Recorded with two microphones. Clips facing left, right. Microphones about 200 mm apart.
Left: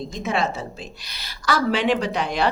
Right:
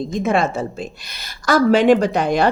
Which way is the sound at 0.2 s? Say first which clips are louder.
Right 6 dB; 50° right (ahead or behind).